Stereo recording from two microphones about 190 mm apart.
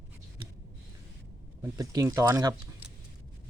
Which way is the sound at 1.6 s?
20° right (ahead or behind).